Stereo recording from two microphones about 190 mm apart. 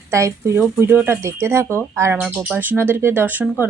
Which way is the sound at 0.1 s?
15° right (ahead or behind).